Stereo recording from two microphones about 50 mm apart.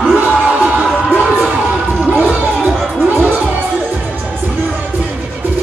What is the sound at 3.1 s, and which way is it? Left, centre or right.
Music, right.